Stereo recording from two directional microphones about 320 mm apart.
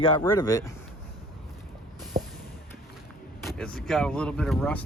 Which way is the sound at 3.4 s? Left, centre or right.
Centre.